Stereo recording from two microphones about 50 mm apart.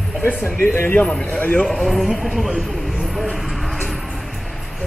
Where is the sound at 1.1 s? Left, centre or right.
Left.